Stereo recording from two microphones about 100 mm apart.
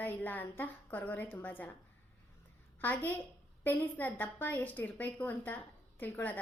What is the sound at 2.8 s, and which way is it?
A woman's voice, 20° left (ahead or behind).